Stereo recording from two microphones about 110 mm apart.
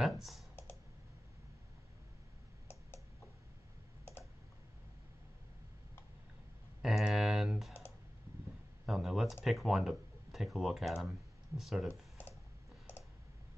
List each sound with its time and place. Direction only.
0.2 s computer keyboard: centre (ahead or behind)
6.8 s typing: 5° right (ahead or behind)
8.8 s speech: centre (ahead or behind)
11.9 s computer keyboard: 20° left (ahead or behind)